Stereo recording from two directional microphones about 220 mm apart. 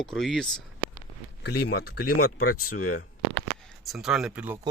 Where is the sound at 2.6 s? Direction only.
90° left.